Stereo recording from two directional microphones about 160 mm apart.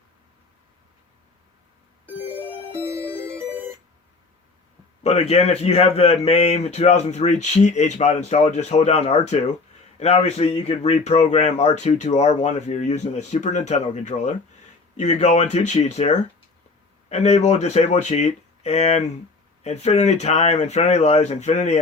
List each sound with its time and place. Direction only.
2.4 s music: 10° left (ahead or behind)
2.8 s music: 15° right (ahead or behind)
5.0 s a man's voice: 45° left (ahead or behind)